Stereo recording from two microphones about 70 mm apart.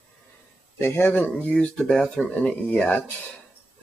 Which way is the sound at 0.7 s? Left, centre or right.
Left.